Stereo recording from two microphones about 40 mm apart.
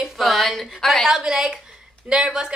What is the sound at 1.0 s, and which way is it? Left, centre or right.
A woman's voice, centre.